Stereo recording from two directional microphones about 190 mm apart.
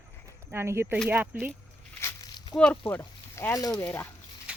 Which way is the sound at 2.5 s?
5° left (ahead or behind).